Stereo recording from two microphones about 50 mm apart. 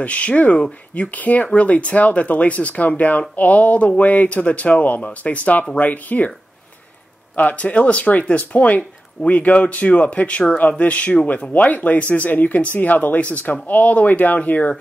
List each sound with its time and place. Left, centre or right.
0.0 s speech: left
7.3 s speech: left